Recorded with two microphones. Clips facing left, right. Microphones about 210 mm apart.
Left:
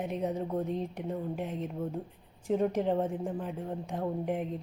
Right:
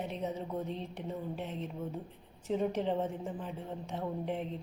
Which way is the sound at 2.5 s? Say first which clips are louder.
Left 4 dB; 10° left (ahead or behind).